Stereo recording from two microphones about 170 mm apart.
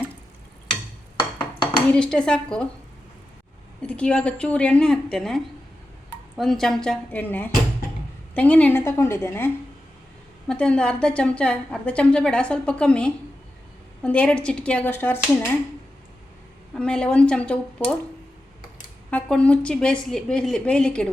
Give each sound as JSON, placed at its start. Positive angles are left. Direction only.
{"t": 1.9, "sound": "a woman's voice", "side_deg": 5}
{"t": 3.8, "sound": "a woman's voice", "side_deg": 5}
{"t": 10.5, "sound": "a woman's voice", "side_deg": 5}
{"t": 16.7, "sound": "a woman's voice", "side_deg": 5}
{"t": 19.1, "sound": "a woman's voice", "side_deg": 5}